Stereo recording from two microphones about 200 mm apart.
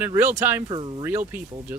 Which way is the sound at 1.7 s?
10° right (ahead or behind).